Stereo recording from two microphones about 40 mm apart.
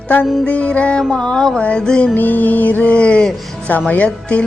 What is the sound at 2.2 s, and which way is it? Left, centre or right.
Speech, left.